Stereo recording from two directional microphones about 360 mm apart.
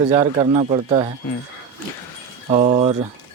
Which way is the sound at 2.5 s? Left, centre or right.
Centre.